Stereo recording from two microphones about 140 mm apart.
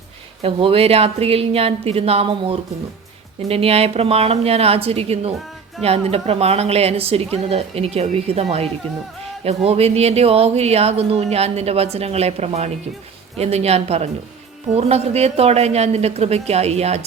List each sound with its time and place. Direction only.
0.4 s speech: 45° right (ahead or behind)